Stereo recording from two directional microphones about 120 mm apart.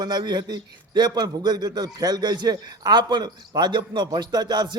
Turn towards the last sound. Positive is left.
turn(degrees=-35)  # may be behind; listen again after turning